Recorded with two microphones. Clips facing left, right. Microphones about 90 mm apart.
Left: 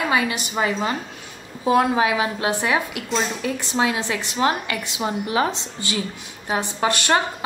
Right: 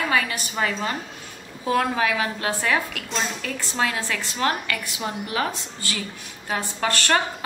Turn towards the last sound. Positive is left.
turn(degrees=20)  # may be behind; listen again after turning